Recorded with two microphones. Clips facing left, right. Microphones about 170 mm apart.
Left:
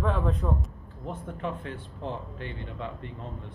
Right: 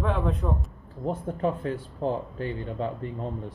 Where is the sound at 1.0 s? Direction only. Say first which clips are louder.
Right 7 dB; 40° right (ahead or behind).